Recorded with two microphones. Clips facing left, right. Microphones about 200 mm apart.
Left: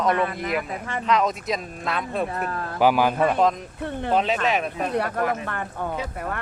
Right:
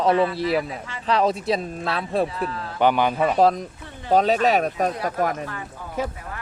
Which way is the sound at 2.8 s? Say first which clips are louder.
Even; 5° left (ahead or behind).